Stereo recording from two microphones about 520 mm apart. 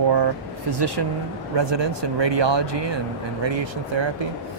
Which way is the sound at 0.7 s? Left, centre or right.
Right.